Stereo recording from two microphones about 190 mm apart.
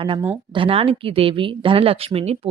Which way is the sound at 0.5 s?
30° right (ahead or behind).